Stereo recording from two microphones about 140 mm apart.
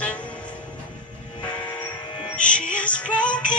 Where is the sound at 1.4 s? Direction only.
30° left (ahead or behind).